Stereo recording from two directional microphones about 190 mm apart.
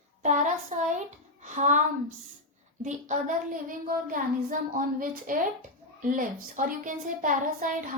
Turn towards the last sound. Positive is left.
turn(degrees=-45)  # may be behind; listen again after turning